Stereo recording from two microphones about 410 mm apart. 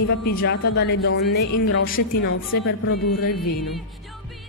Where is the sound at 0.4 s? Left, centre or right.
Left.